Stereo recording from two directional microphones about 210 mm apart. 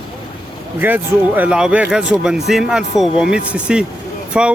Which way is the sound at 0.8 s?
10° right (ahead or behind).